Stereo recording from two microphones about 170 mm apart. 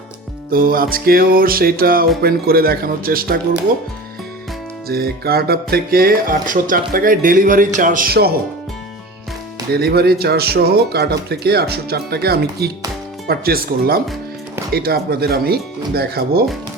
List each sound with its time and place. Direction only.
0.5 s speech: 60° right (ahead or behind)
4.9 s speech: 65° right (ahead or behind)
9.7 s speech: 65° right (ahead or behind)